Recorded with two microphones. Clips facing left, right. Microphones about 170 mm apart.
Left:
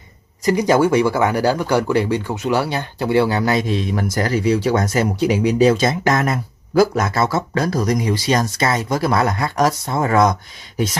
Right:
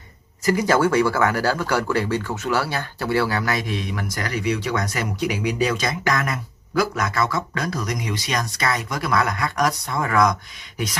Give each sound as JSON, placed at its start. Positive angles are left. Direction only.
{"t": 0.5, "sound": "speech", "side_deg": 15}